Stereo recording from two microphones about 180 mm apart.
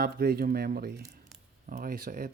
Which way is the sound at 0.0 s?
60° right (ahead or behind).